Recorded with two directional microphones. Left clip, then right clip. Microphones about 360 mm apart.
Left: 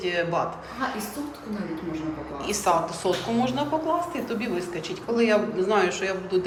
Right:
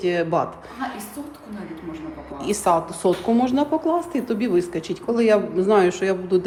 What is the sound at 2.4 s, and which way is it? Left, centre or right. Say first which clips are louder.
A woman's voice: right 3 dB; centre.